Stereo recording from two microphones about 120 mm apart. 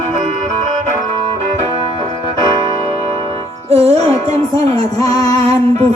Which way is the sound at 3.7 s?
60° right (ahead or behind).